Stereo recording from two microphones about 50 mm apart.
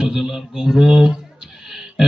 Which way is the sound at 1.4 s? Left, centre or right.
Centre.